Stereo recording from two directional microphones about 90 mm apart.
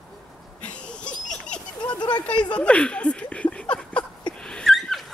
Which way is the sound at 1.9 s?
55° left (ahead or behind).